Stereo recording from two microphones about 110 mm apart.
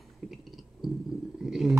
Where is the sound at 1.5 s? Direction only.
5° right (ahead or behind).